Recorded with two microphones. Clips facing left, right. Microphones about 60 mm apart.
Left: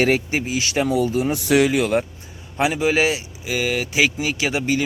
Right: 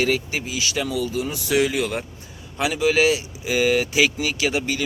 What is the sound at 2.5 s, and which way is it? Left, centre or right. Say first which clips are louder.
Speech: left 1 dB; left.